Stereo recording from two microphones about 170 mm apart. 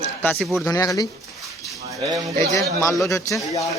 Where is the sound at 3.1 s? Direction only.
15° left (ahead or behind).